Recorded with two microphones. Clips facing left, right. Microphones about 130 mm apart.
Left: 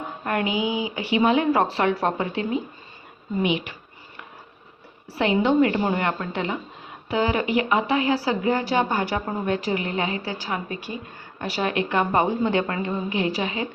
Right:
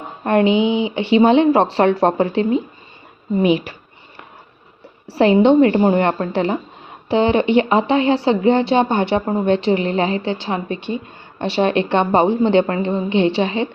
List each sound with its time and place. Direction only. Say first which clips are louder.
0.3 s a woman's voice: right 10 dB; 30° right (ahead or behind)
5.1 s a woman's voice: right 8 dB; 35° right (ahead or behind)